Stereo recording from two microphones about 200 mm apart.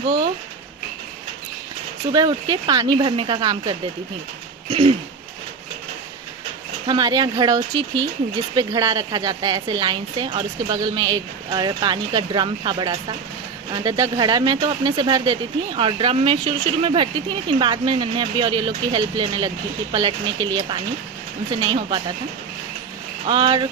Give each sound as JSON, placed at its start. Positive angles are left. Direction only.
{"t": 2.1, "sound": "speech", "side_deg": -20}
{"t": 4.7, "sound": "a sound", "side_deg": -30}
{"t": 6.8, "sound": "speech", "side_deg": -20}
{"t": 23.2, "sound": "speech", "side_deg": -25}